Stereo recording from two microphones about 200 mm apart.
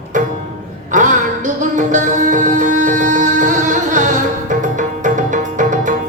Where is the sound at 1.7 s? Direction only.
40° right (ahead or behind).